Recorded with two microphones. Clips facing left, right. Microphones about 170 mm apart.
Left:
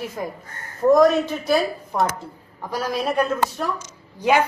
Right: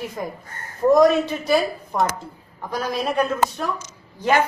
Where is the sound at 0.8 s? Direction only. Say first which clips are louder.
Even; centre (ahead or behind).